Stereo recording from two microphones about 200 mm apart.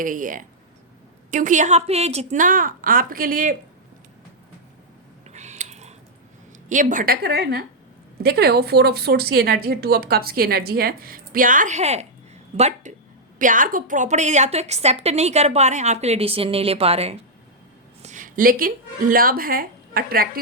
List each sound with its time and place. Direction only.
0.0 s a woman's voice: 40° right (ahead or behind)
5.3 s a sound: 35° right (ahead or behind)
6.7 s a woman's voice: 40° right (ahead or behind)